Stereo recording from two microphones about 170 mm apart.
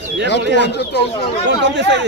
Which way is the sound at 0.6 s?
85° left.